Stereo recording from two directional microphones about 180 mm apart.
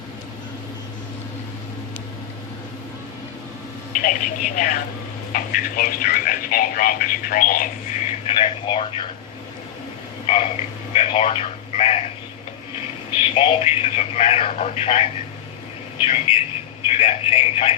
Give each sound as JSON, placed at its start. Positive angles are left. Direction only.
{"t": 3.9, "sound": "speech", "side_deg": 45}
{"t": 10.2, "sound": "frog", "side_deg": 35}
{"t": 10.9, "sound": "a man's voice", "side_deg": 35}
{"t": 13.3, "sound": "speech", "side_deg": 35}